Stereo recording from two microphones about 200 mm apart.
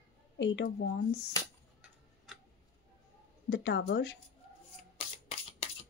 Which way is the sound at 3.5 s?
55° left (ahead or behind).